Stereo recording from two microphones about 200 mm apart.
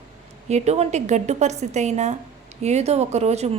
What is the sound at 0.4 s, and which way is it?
A woman's voice, 35° right (ahead or behind).